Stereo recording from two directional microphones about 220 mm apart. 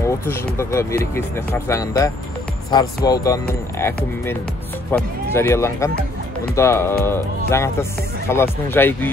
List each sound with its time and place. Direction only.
0.0 s speech: 10° left (ahead or behind)